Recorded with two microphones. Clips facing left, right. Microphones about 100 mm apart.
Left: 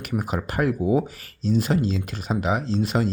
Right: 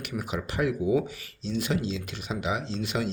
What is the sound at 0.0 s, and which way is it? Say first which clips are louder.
Speech: left 5 dB; 40° left (ahead or behind).